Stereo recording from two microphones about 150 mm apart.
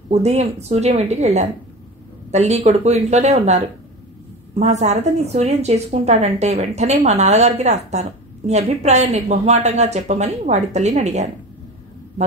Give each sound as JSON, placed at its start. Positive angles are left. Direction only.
{"t": 0.1, "sound": "a woman's voice", "side_deg": -45}